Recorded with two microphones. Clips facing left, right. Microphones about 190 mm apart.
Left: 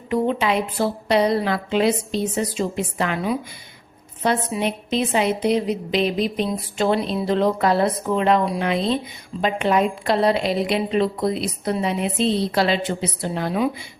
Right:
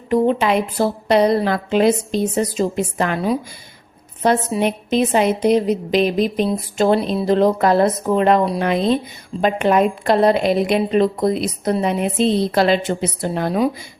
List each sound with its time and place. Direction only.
0.1 s a woman's voice: 45° right (ahead or behind)